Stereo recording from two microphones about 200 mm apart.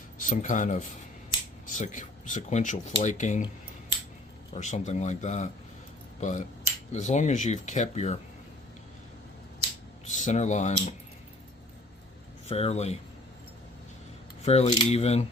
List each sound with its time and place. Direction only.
0.2 s speech: 40° left (ahead or behind)
4.5 s speech: 35° left (ahead or behind)
10.2 s speech: 35° left (ahead or behind)
12.5 s speech: 30° left (ahead or behind)
14.4 s speech: 30° left (ahead or behind)